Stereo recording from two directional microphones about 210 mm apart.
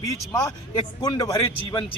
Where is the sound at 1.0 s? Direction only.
20° left (ahead or behind).